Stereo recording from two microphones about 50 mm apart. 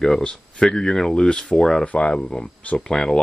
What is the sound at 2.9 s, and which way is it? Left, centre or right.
Speech, centre.